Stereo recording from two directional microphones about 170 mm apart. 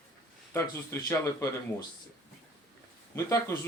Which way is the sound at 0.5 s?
15° left (ahead or behind).